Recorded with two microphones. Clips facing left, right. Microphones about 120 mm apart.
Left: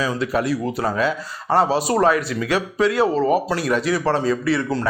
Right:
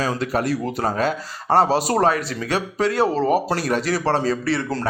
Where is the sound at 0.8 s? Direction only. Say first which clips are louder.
Even; 40° right (ahead or behind).